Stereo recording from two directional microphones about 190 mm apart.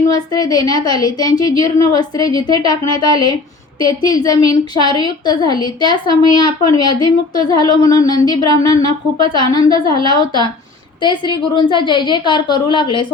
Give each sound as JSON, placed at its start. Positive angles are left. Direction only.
{"t": 0.1, "sound": "a woman's voice", "side_deg": 20}
{"t": 3.8, "sound": "a woman's voice", "side_deg": 20}